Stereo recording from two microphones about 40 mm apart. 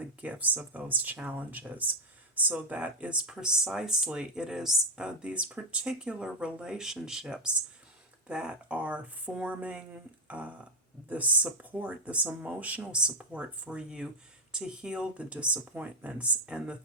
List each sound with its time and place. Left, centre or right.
0.0 s speech: right
3.2 s speech: centre
5.0 s speech: right
15.3 s speech: right